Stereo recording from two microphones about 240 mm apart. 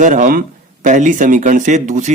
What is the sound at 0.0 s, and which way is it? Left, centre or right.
Speech, right.